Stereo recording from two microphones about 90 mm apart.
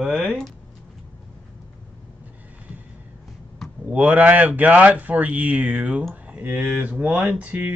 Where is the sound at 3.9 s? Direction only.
15° right (ahead or behind).